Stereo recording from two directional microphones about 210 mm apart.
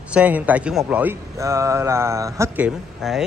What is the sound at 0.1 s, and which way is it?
A man's voice, 5° right (ahead or behind).